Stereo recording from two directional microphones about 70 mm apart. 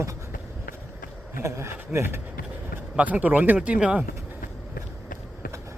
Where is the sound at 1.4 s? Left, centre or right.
Right.